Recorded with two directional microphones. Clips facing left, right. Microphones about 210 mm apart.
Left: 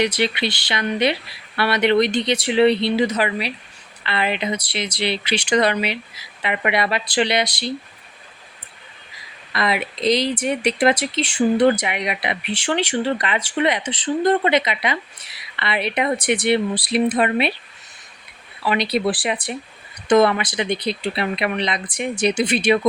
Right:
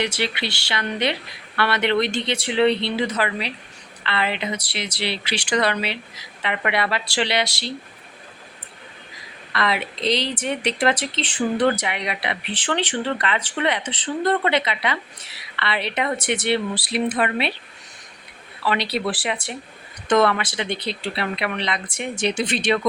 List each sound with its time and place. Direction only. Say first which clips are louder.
0.2 s speech: left 5 dB; 20° left (ahead or behind)
9.5 s speech: left 2 dB; 10° left (ahead or behind)
18.6 s speech: left 3 dB; 15° left (ahead or behind)